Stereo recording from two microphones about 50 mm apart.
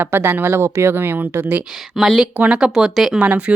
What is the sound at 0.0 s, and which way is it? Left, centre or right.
Speech, right.